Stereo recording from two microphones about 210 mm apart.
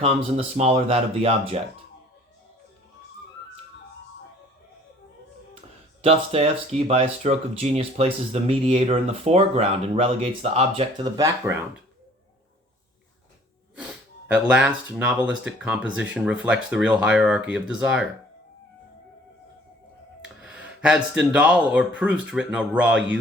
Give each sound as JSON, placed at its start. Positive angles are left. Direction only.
{"t": 0.0, "sound": "speech", "side_deg": -25}
{"t": 6.0, "sound": "speech", "side_deg": -30}
{"t": 13.7, "sound": "speech", "side_deg": -5}
{"t": 20.2, "sound": "speech", "side_deg": -5}